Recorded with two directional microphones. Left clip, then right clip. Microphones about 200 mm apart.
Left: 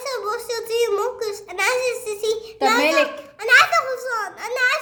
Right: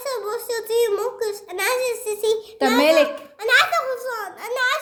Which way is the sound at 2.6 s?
35° right (ahead or behind).